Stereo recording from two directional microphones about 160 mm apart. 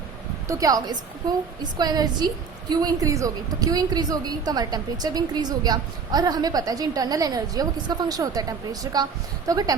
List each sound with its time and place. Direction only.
0.4 s a woman's voice: 20° right (ahead or behind)